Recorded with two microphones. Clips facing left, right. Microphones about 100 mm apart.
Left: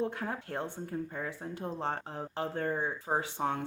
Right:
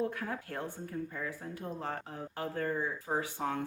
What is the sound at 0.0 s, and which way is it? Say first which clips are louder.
Speech: left 1 dB; 25° left (ahead or behind).